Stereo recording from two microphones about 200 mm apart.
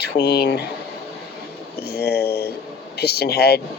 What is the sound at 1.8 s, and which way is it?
Speech, 55° left (ahead or behind).